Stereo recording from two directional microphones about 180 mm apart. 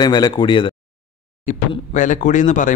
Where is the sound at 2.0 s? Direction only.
45° left (ahead or behind).